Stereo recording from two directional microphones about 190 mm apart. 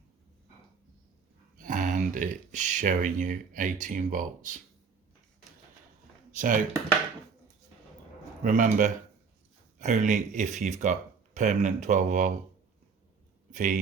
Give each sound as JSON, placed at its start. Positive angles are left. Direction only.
{"t": 1.5, "sound": "speech", "side_deg": -45}
{"t": 6.3, "sound": "speech", "side_deg": -45}
{"t": 8.4, "sound": "speech", "side_deg": -40}
{"t": 13.5, "sound": "speech", "side_deg": -45}